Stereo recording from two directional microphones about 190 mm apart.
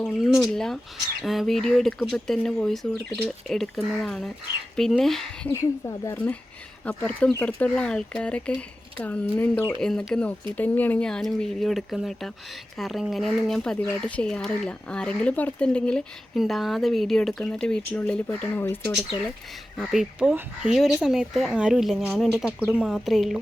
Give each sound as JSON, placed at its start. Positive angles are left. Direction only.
{"t": 0.0, "sound": "speech", "side_deg": 0}
{"t": 19.8, "sound": "speech", "side_deg": 0}